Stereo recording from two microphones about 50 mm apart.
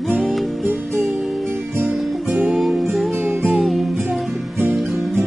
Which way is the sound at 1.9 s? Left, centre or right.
Centre.